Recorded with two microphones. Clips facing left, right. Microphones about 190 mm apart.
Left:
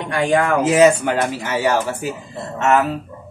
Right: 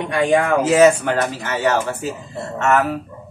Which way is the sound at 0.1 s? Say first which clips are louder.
Right 1 dB; 20° right (ahead or behind).